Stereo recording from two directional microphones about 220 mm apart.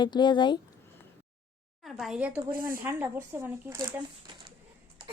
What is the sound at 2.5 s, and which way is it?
Speech, 40° right (ahead or behind).